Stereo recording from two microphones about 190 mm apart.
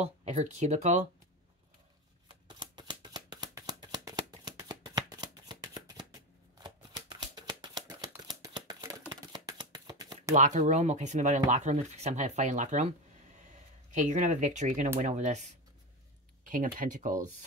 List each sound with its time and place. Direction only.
0.0 s speech: 35° right (ahead or behind)
2.4 s shuffling cards: 25° right (ahead or behind)
7.3 s a sound: 20° right (ahead or behind)
9.1 s chopping: 20° right (ahead or behind)
10.3 s speech: 40° right (ahead or behind)
13.9 s speech: 40° right (ahead or behind)